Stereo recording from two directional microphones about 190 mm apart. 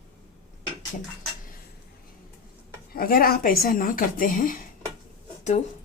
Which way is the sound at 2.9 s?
50° left (ahead or behind).